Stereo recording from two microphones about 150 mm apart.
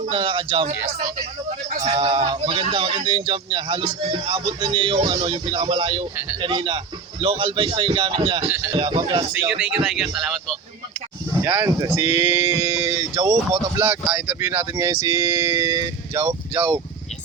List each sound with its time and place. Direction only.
0.1 s a man's voice: 35° right (ahead or behind)
1.7 s a man's voice: 45° right (ahead or behind)
8.4 s speech: 15° right (ahead or behind)
8.7 s a man's voice: 35° right (ahead or behind)
9.5 s a man's voice: 5° right (ahead or behind)
11.3 s speech: 20° right (ahead or behind)